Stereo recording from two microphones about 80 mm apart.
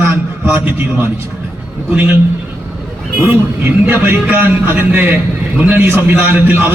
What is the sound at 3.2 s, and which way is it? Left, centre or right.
A man's voice, right.